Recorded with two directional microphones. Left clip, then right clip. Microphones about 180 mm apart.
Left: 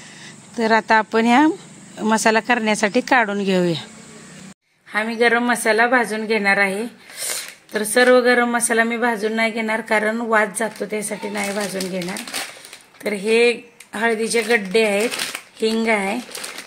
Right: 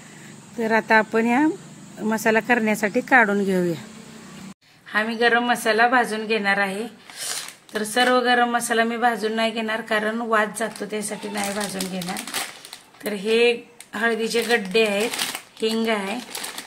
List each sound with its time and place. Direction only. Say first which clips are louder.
0.6 s speech: left 3 dB; 30° left (ahead or behind)
2.0 s speech: left 4 dB; 30° left (ahead or behind)
4.9 s speech: left 2 dB; 45° left (ahead or behind)
13.0 s speech: left 3 dB; 45° left (ahead or behind)